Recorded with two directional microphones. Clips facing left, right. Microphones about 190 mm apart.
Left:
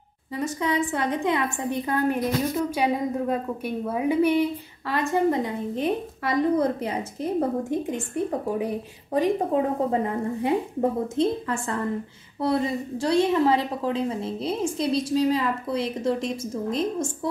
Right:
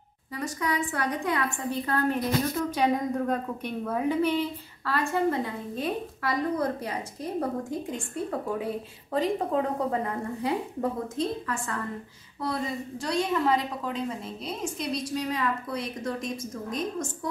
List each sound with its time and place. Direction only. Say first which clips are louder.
0.4 s a woman's voice: left 4 dB; 25° left (ahead or behind)